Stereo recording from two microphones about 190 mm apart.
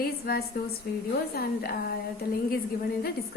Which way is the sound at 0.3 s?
55° left (ahead or behind).